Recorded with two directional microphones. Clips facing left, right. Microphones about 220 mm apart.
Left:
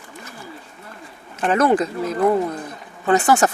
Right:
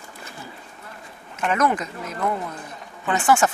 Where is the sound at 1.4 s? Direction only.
30° left (ahead or behind).